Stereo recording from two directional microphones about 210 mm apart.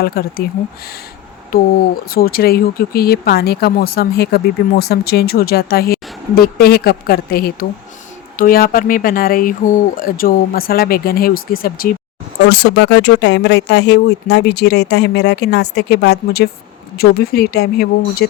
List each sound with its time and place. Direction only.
0.0 s speech: 45° left (ahead or behind)
1.5 s speech: 45° left (ahead or behind)